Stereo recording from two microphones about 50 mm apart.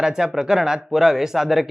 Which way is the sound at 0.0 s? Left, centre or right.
Centre.